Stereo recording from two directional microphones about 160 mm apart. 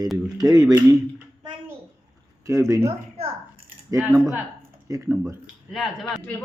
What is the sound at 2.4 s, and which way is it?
Speech, 20° right (ahead or behind).